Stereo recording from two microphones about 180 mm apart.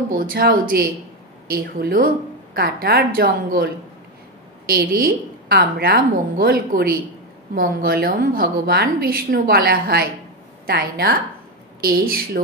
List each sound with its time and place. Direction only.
0.1 s a woman's voice: 50° right (ahead or behind)